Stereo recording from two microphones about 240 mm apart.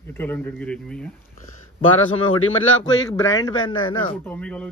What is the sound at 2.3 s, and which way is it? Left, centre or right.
Speech, left.